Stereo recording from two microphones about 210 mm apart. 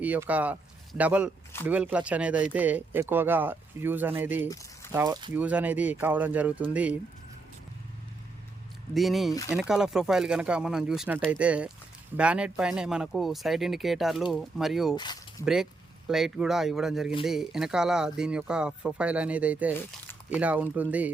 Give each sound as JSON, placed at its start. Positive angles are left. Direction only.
{"t": 0.0, "sound": "speech", "side_deg": -10}
{"t": 4.4, "sound": "a sound", "side_deg": 15}
{"t": 4.9, "sound": "speech", "side_deg": -15}
{"t": 5.3, "sound": "speech", "side_deg": -5}
{"t": 9.0, "sound": "speech", "side_deg": 0}
{"t": 9.3, "sound": "speech", "side_deg": 15}
{"t": 9.6, "sound": "speech", "side_deg": -5}
{"t": 14.9, "sound": "speech", "side_deg": 20}
{"t": 16.0, "sound": "speech", "side_deg": 0}